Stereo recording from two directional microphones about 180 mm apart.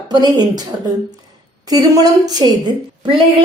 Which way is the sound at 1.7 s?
20° right (ahead or behind).